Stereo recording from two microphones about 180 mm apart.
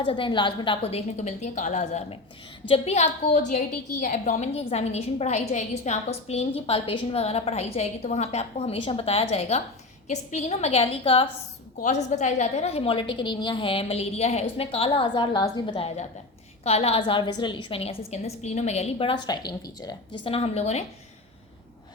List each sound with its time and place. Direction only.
0.0 s a woman's voice: 30° left (ahead or behind)